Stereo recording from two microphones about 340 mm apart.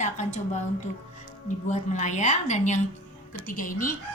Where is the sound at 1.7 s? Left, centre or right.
Left.